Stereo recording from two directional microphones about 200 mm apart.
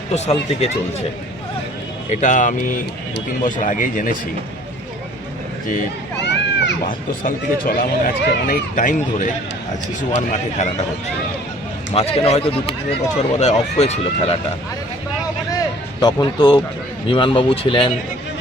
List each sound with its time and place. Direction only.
0.1 s speech: 35° left (ahead or behind)
2.0 s speech: 40° left (ahead or behind)
6.2 s run: 60° left (ahead or behind)
7.3 s speech: 45° left (ahead or behind)
11.9 s speech: 30° left (ahead or behind)
16.0 s speech: 20° left (ahead or behind)